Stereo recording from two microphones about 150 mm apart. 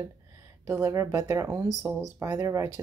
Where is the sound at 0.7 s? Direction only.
20° right (ahead or behind).